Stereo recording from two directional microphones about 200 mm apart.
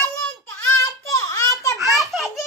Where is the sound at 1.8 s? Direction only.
Centre (ahead or behind).